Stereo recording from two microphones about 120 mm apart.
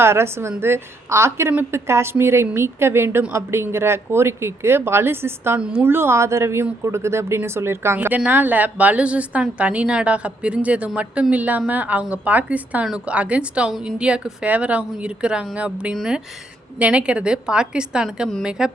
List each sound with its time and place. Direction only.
0.0 s a woman's voice: 20° right (ahead or behind)